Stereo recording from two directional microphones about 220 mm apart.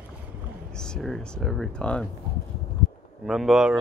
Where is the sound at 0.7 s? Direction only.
5° left (ahead or behind).